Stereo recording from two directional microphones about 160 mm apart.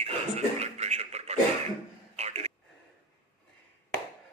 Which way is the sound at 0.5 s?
40° right (ahead or behind).